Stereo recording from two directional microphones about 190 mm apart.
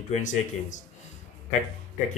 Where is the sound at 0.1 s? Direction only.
40° left (ahead or behind).